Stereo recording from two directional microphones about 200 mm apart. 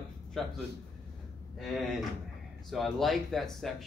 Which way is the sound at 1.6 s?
Centre (ahead or behind).